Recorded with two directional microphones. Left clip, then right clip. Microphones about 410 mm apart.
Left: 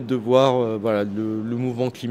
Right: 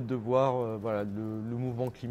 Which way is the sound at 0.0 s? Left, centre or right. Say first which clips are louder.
Left 10 dB; right.